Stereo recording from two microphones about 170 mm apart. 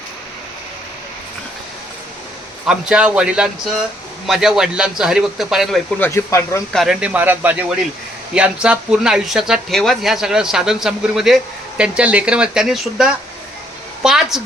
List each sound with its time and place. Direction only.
2.6 s speech: 5° right (ahead or behind)
6.0 s speech: 15° left (ahead or behind)
6.7 s speech: centre (ahead or behind)